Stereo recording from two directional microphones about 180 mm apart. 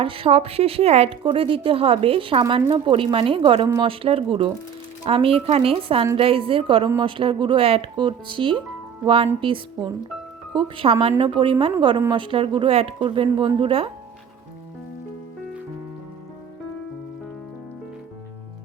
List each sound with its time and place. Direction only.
0.0 s a woman's voice: 30° right (ahead or behind)